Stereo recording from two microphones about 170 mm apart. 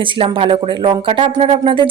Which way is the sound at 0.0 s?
30° right (ahead or behind).